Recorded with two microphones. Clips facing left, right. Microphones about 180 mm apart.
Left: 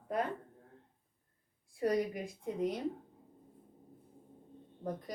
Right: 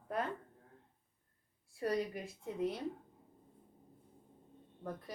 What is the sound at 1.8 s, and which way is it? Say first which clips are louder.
A woman's voice: left 4 dB; 15° left (ahead or behind).